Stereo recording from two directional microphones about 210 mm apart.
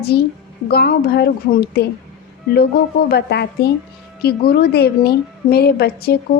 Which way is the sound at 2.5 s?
50° left (ahead or behind).